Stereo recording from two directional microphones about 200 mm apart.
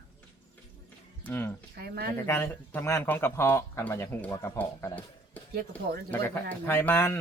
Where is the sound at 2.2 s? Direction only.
10° left (ahead or behind).